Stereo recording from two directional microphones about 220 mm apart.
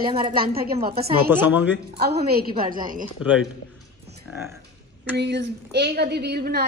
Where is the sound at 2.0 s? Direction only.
45° right (ahead or behind).